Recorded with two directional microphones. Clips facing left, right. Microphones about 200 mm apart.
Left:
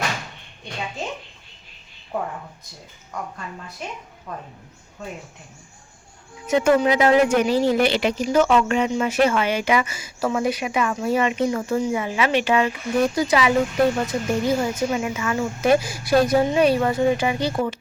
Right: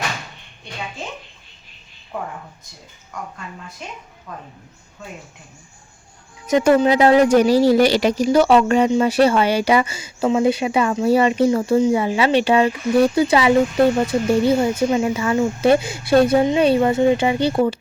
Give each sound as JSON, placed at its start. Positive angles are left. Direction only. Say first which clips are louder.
{"t": 6.5, "sound": "speech", "louder": "right 3 dB", "side_deg": -40}